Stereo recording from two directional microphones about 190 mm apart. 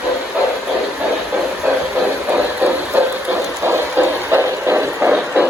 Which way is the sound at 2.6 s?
10° right (ahead or behind).